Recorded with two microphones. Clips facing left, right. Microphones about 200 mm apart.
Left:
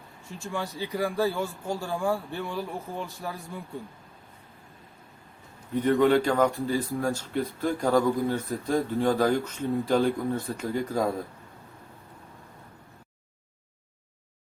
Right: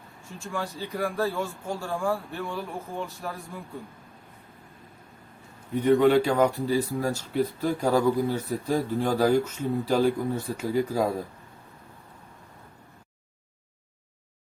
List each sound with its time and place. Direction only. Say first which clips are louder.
0.5 s a man's voice: left 1 dB; 5° left (ahead or behind)
5.7 s speech: right 2 dB; 10° right (ahead or behind)